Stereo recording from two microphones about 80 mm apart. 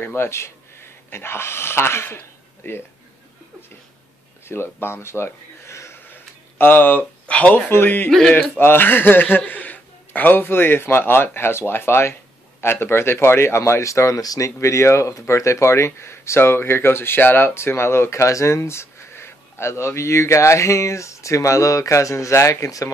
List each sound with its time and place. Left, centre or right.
0.0 s speech: left
4.5 s speech: left
8.1 s speech: centre
8.5 s a man's voice: left